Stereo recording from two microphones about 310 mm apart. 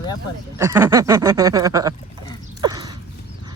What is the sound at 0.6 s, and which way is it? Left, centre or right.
Speech, centre.